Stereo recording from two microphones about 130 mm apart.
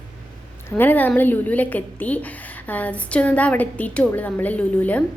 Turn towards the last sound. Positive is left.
turn(degrees=10)  # may be behind; listen again after turning